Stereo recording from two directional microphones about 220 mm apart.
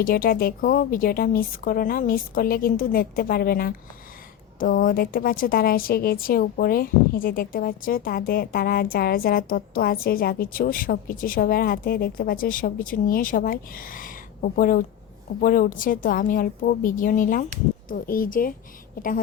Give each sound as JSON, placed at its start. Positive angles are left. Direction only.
{"t": 0.0, "sound": "a woman's voice", "side_deg": 40}